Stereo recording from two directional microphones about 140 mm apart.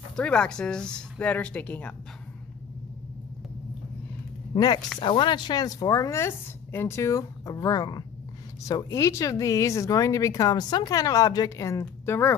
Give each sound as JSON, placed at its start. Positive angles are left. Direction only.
{"t": 0.1, "sound": "speech", "side_deg": 5}
{"t": 4.6, "sound": "speech", "side_deg": 30}